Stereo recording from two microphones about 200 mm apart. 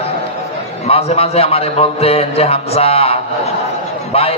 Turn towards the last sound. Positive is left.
turn(degrees=30)  # may be behind; listen again after turning